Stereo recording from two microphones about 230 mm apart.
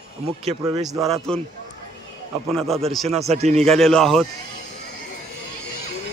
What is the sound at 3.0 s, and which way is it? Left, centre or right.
Speech, right.